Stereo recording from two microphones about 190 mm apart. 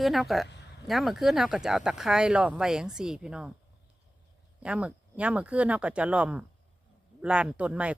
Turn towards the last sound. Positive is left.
turn(degrees=-5)  # may be behind; listen again after turning